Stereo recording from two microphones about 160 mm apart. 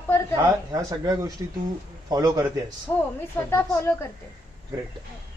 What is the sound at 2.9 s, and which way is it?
A woman's voice, 20° left (ahead or behind).